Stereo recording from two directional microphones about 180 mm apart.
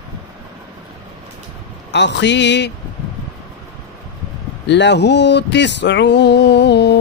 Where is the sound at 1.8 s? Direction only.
75° left (ahead or behind).